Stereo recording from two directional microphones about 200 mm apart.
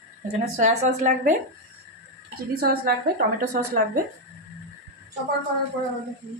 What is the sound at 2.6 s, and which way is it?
Speech, 45° right (ahead or behind).